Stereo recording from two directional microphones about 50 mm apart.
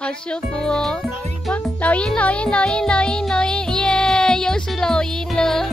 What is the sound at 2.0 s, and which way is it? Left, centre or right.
Music, left.